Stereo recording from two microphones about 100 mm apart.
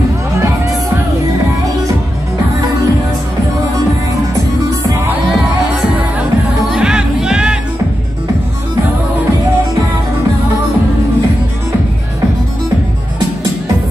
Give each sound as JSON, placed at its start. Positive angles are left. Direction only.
{"t": 6.7, "sound": "music", "side_deg": -10}